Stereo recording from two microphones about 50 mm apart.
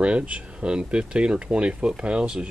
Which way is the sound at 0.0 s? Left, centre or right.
Right.